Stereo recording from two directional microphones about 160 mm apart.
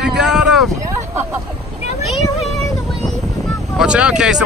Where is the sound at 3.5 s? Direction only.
5° right (ahead or behind).